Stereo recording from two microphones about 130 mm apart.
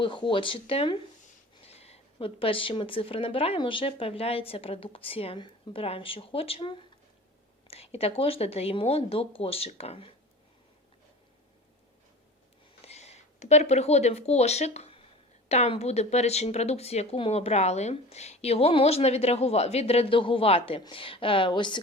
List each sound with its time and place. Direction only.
0.0 s speech: 40° left (ahead or behind)
12.8 s speech: 55° left (ahead or behind); by 21.8 s 35° left (ahead or behind)